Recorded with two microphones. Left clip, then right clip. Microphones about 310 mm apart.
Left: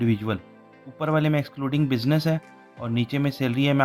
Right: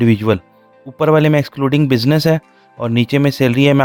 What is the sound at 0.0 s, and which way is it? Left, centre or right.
Speech, right.